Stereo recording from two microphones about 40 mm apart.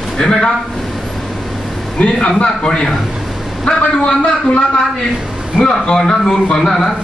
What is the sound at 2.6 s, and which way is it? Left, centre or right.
A man's voice, centre.